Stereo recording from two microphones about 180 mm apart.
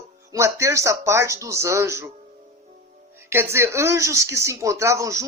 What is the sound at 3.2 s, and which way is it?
Speech, 15° right (ahead or behind).